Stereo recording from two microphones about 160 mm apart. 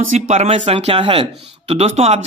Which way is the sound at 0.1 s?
45° right (ahead or behind).